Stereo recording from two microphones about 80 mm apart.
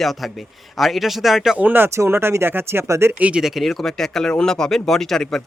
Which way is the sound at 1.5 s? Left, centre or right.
Right.